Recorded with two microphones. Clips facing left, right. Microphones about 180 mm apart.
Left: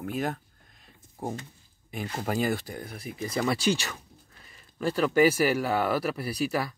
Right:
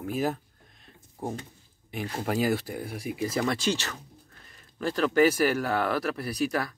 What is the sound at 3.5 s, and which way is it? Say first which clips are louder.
Speech: left 2 dB; 10° left (ahead or behind).